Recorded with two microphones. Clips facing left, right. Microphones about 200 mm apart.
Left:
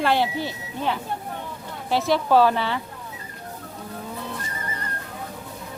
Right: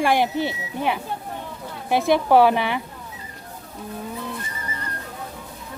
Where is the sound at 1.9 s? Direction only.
15° right (ahead or behind).